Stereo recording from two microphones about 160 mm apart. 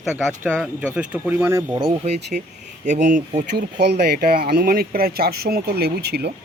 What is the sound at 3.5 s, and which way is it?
Speech, 90° right.